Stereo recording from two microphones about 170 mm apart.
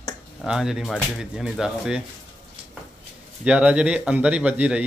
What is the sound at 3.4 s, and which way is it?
Speech, 5° right (ahead or behind).